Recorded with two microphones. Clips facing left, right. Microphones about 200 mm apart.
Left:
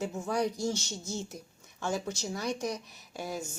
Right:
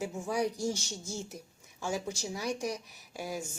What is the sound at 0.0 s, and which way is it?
Speech, 10° right (ahead or behind).